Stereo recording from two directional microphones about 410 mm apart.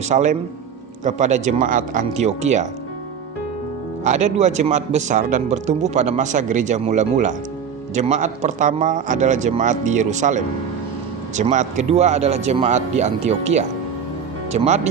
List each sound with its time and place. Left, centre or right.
0.1 s speech: centre
4.0 s speech: centre